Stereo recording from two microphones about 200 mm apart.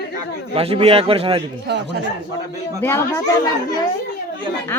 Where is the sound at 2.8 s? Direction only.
10° left (ahead or behind).